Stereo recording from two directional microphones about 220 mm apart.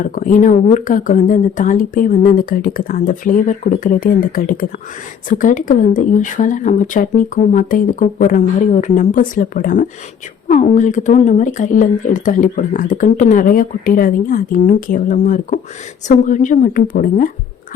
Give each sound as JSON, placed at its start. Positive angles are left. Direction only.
{"t": 0.0, "sound": "speech", "side_deg": 35}